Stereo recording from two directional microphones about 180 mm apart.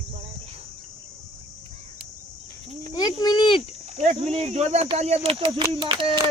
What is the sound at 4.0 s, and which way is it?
Speech, 40° right (ahead or behind).